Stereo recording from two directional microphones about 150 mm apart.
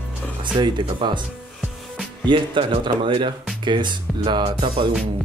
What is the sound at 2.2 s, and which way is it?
Speech, 35° right (ahead or behind).